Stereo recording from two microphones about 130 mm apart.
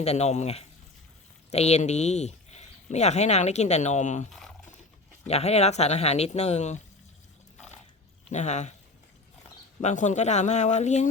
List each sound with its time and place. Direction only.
0.0 s speech: 55° left (ahead or behind)
4.3 s a sound: centre (ahead or behind)
5.3 s speech: 55° left (ahead or behind)
8.3 s speech: 60° left (ahead or behind)
9.8 s speech: 65° left (ahead or behind)